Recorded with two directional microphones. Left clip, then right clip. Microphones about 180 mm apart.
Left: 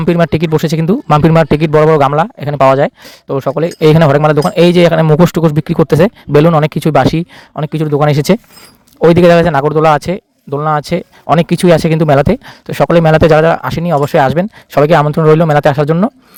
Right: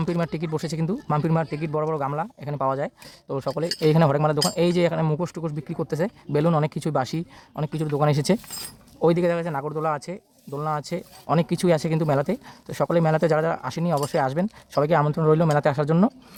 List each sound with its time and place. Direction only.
0.0 s a man's voice: 40° left (ahead or behind)